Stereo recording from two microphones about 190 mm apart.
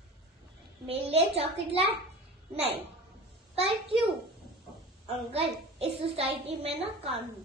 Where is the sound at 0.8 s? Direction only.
30° right (ahead or behind).